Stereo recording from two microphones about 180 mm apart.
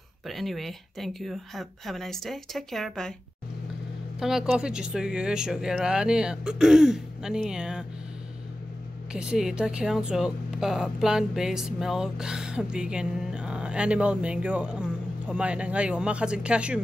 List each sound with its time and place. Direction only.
0.3 s speech: centre (ahead or behind)
4.2 s speech: 5° right (ahead or behind)
9.1 s speech: 5° right (ahead or behind)